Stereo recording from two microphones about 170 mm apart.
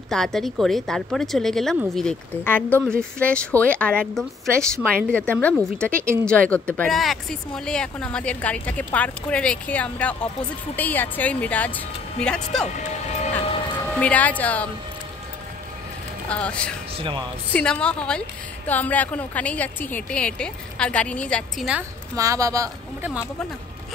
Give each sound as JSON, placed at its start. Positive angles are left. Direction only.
{"t": 0.1, "sound": "speech", "side_deg": 0}
{"t": 12.6, "sound": "music", "side_deg": 45}
{"t": 13.8, "sound": "speech", "side_deg": 5}
{"t": 16.3, "sound": "speech", "side_deg": 5}
{"t": 16.9, "sound": "speech", "side_deg": -30}
{"t": 17.5, "sound": "speech", "side_deg": 5}
{"t": 22.1, "sound": "speech", "side_deg": -20}